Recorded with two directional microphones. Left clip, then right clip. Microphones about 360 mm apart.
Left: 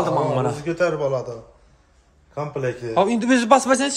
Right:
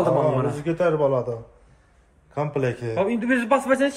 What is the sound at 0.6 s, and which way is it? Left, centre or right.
Speech, right.